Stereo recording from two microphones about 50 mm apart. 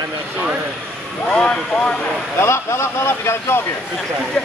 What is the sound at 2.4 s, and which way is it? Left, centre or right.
Speech, left.